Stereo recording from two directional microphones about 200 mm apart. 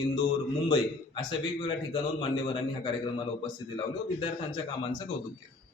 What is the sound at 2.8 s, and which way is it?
A man's voice, 25° left (ahead or behind).